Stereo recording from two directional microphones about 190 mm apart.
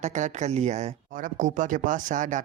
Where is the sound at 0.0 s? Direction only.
40° right (ahead or behind).